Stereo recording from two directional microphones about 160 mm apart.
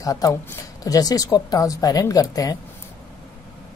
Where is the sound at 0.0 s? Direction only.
20° left (ahead or behind).